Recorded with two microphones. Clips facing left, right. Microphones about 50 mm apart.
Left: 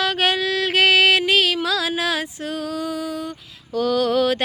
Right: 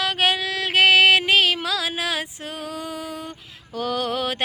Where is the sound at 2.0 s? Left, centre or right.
Centre.